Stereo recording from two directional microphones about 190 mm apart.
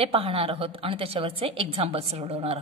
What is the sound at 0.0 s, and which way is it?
A woman's voice, 30° right (ahead or behind).